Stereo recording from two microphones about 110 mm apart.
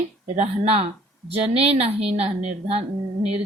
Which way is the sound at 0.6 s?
70° right (ahead or behind).